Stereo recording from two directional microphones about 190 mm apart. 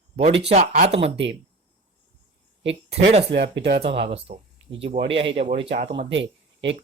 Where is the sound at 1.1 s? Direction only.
65° right (ahead or behind).